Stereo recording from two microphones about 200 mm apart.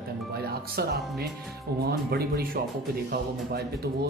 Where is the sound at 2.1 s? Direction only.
50° right (ahead or behind).